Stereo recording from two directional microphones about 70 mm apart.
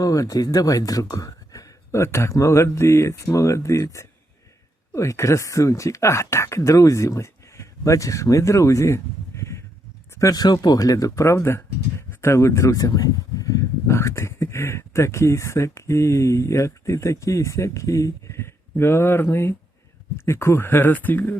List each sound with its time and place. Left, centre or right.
0.0 s speech: left
2.0 s speech: left
10.3 s speech: left